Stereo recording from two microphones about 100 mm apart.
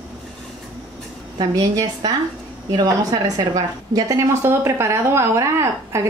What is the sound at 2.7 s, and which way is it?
A woman's voice, 40° right (ahead or behind).